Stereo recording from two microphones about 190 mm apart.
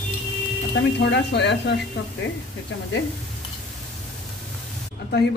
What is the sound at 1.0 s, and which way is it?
Speech, 65° left (ahead or behind).